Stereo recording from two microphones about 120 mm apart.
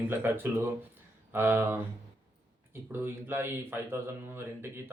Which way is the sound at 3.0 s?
15° right (ahead or behind).